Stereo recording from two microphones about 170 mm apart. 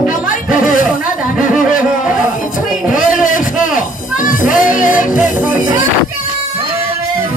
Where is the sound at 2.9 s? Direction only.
50° left (ahead or behind).